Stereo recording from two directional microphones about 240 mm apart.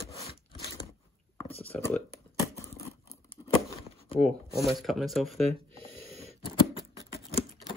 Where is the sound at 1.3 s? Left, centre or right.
Left.